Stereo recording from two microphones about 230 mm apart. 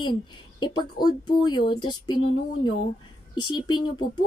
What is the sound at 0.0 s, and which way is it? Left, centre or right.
Speech, centre.